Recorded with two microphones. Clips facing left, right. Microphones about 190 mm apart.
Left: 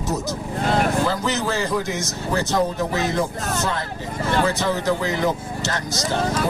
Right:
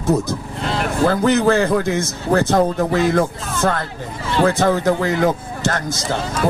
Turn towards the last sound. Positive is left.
turn(degrees=-50)  # may be behind; listen again after turning